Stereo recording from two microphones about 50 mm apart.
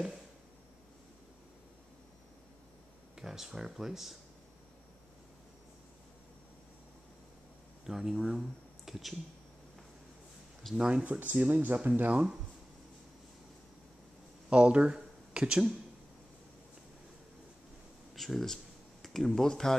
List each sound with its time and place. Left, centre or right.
3.2 s speech: centre
7.8 s speech: centre
10.8 s speech: centre
11.1 s speech: right
14.5 s speech: right
18.1 s speech: centre